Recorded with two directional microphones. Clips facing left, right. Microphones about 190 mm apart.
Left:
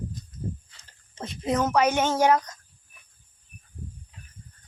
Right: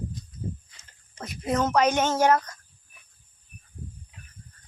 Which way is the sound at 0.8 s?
25° left (ahead or behind).